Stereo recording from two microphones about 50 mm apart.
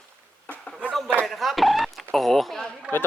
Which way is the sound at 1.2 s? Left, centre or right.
Centre.